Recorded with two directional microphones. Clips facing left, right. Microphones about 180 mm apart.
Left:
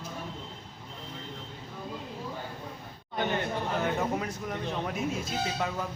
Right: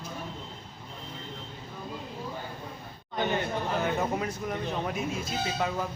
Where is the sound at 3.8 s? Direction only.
Centre (ahead or behind).